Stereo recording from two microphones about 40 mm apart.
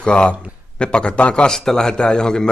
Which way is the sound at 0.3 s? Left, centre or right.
Left.